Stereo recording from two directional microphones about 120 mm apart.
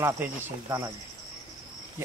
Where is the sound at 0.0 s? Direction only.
20° right (ahead or behind).